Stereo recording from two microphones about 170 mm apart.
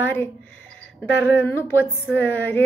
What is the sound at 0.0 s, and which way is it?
Speech, 10° left (ahead or behind).